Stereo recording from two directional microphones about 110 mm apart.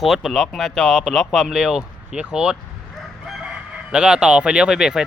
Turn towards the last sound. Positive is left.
turn(degrees=-5)  # may be behind; listen again after turning